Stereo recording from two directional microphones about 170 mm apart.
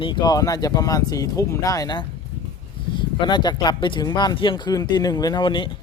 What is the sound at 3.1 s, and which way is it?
Speech, 25° left (ahead or behind).